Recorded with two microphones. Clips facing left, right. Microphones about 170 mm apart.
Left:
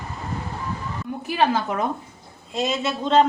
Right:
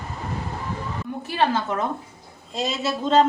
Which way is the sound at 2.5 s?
Centre (ahead or behind).